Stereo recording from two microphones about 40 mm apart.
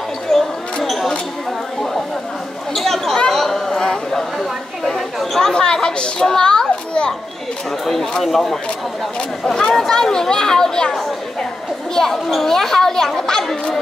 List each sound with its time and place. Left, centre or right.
0.3 s a sound: centre
2.7 s chatter: centre
5.4 s a sound: centre
6.2 s children playing: centre
7.8 s a child's voice: centre
9.4 s a child's voice: centre